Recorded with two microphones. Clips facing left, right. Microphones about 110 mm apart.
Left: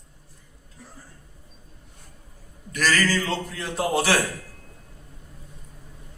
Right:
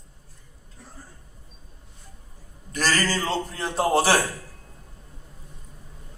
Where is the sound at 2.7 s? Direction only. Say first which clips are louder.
Left 2 dB; 30° right (ahead or behind).